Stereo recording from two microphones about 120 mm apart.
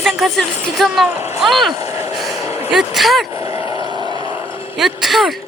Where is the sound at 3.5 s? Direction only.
55° left (ahead or behind).